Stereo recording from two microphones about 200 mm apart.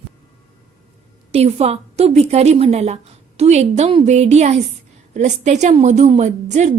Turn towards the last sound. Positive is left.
turn(degrees=-35)  # may be behind; listen again after turning